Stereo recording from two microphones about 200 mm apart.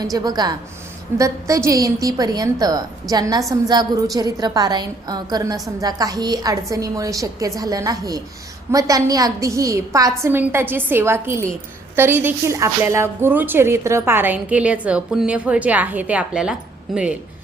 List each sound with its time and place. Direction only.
0.0 s a woman's voice: 20° right (ahead or behind)